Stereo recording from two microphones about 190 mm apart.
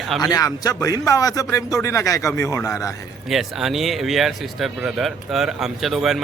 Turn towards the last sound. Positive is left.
turn(degrees=0)  # may be behind; listen again after turning